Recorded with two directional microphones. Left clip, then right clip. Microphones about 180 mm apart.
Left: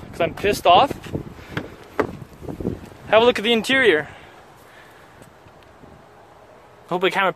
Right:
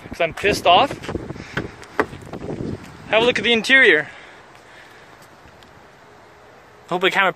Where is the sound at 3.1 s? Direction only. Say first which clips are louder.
Left 2 dB; 30° left (ahead or behind).